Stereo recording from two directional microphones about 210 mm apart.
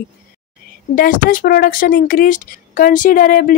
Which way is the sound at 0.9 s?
40° left (ahead or behind).